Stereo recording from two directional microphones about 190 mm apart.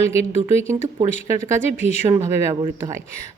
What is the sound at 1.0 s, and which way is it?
Speech, 15° right (ahead or behind).